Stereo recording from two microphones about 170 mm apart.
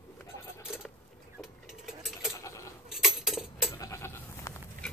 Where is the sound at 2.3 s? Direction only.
15° left (ahead or behind).